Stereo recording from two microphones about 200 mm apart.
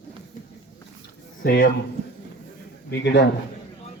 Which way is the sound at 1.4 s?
45° left (ahead or behind).